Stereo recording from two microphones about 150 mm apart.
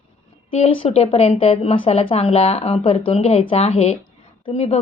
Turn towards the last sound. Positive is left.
turn(degrees=45)  # may be behind; listen again after turning